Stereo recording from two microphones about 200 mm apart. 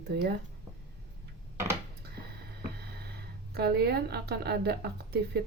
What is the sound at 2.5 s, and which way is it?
Speech, 55° right (ahead or behind).